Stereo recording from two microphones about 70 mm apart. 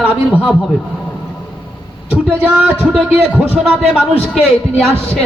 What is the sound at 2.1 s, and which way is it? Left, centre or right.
Speech, right.